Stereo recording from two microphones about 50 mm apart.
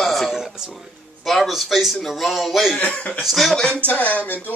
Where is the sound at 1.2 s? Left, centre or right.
Centre.